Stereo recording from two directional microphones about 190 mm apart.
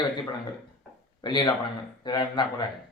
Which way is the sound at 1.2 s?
25° left (ahead or behind).